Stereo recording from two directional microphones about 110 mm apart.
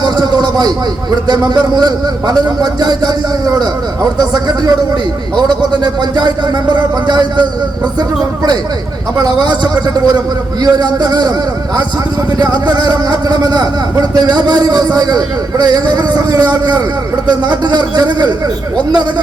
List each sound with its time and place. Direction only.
0.0 s a man's voice: 40° right (ahead or behind)
5.8 s speech: 40° right (ahead or behind)
9.2 s speech: 40° right (ahead or behind)
12.4 s speech: 40° right (ahead or behind)